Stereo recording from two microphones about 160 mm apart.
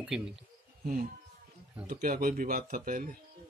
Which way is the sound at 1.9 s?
65° right (ahead or behind).